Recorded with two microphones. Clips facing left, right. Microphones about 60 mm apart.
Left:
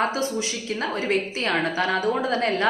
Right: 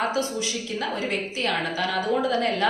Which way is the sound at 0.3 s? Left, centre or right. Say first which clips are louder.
Left 1 dB; left.